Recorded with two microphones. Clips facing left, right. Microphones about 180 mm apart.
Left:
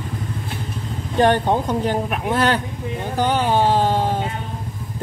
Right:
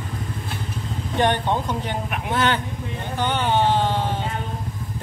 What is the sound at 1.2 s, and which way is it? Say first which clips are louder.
Speech: left 5 dB; 40° left (ahead or behind).